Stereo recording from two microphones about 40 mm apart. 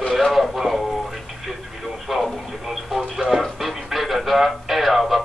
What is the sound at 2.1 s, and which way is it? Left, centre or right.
Radio, centre.